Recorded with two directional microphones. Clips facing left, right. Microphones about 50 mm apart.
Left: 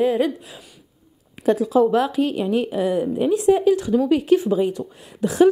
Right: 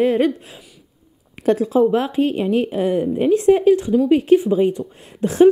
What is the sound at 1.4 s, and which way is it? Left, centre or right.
Speech, right.